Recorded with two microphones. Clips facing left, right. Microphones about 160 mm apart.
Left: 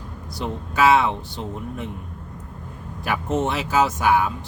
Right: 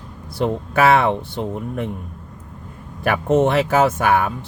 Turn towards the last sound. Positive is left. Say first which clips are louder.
# right 2 dB
turn(degrees=-55)  # may be behind; listen again after turning